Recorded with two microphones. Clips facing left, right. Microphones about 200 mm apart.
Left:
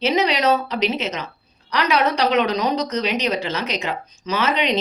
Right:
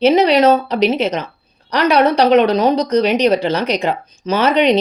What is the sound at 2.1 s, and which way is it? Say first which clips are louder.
Speech: right 8 dB; 55° right (ahead or behind).